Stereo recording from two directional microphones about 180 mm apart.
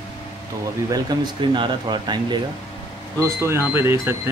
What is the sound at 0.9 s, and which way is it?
Speech, 25° right (ahead or behind).